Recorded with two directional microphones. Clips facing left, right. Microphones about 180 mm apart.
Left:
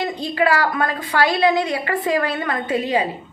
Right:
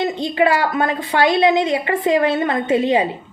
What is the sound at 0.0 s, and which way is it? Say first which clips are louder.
A woman's voice: right 3 dB; 25° right (ahead or behind).